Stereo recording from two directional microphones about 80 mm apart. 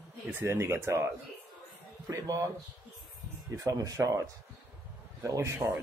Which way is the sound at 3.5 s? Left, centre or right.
Right.